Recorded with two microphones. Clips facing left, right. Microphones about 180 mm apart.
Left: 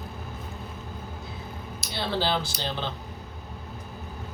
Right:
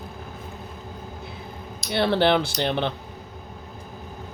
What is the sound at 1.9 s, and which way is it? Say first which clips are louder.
Speech: right 8 dB; 65° right (ahead or behind).